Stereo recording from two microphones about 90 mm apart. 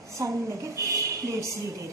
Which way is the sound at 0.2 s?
35° right (ahead or behind).